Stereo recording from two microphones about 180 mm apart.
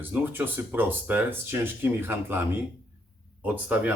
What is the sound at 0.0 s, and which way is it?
Speech, 10° right (ahead or behind).